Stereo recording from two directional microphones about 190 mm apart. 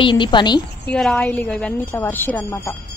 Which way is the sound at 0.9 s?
5° left (ahead or behind).